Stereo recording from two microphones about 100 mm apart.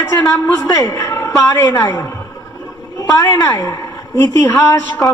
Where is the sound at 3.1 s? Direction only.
30° left (ahead or behind).